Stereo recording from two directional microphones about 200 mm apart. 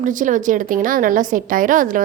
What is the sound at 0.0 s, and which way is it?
A woman's voice, 40° right (ahead or behind).